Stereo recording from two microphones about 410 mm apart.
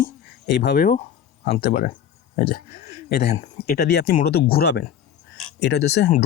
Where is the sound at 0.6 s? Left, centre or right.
Left.